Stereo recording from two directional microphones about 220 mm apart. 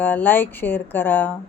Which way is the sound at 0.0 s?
10° left (ahead or behind).